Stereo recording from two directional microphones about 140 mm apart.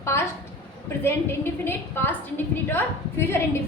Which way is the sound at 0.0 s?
20° left (ahead or behind).